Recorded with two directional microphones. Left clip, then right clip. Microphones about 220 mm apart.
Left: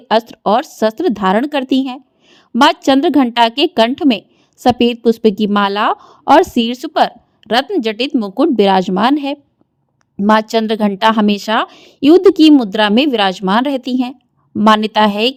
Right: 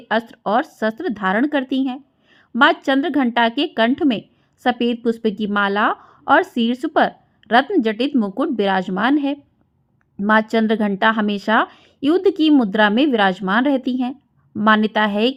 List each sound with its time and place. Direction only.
0.1 s speech: 40° left (ahead or behind)